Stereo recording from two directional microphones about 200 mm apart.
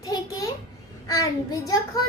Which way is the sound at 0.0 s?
20° left (ahead or behind).